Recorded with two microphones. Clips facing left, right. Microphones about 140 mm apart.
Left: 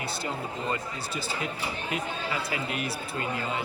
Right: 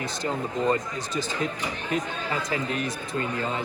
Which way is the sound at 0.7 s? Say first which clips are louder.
Right 6 dB; 40° right (ahead or behind).